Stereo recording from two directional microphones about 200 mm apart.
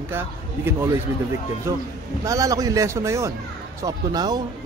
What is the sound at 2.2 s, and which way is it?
Speech, 15° right (ahead or behind).